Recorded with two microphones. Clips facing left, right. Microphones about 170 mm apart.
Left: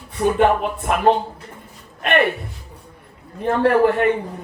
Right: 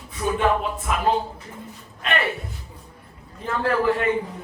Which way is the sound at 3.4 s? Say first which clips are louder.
Left 8 dB; 65° left (ahead or behind).